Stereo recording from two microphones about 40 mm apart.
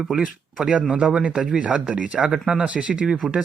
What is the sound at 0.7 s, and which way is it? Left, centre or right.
Speech, right.